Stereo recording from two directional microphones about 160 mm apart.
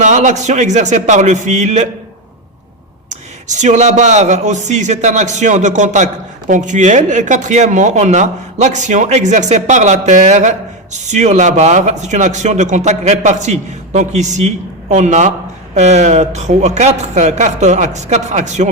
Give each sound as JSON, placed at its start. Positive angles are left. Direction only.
{"t": 0.0, "sound": "a man's voice", "side_deg": -50}
{"t": 3.1, "sound": "a man's voice", "side_deg": -50}